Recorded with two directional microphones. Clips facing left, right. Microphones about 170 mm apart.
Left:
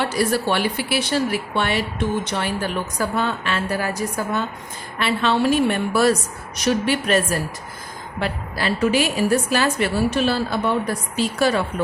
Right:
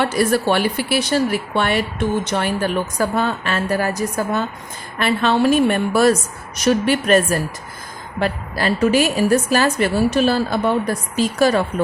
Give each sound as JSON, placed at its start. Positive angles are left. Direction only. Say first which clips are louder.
{"t": 0.0, "sound": "a woman's voice", "louder": "right 3 dB", "side_deg": -55}